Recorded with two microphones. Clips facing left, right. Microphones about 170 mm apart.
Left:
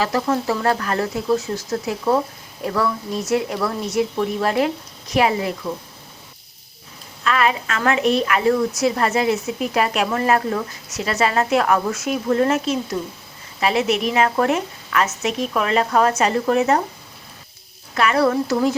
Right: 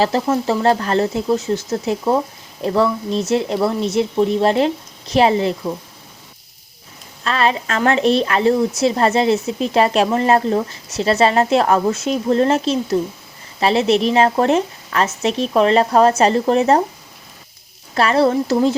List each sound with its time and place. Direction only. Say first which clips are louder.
0.0 s speech: right 3 dB; 25° right (ahead or behind)
7.3 s speech: right 1 dB; 30° right (ahead or behind)
17.9 s speech: right 3 dB; 30° right (ahead or behind)